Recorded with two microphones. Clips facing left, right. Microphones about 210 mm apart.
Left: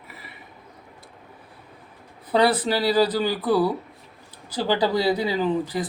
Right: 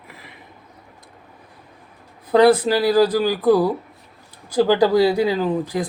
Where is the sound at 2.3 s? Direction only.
10° right (ahead or behind).